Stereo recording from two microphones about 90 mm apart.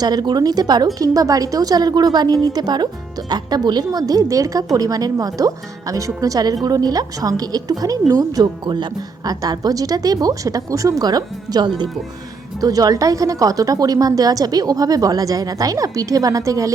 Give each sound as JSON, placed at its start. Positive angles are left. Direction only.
{"t": 0.0, "sound": "a woman's voice", "side_deg": -50}